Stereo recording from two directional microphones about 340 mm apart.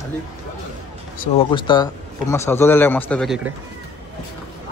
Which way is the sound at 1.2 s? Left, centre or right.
Centre.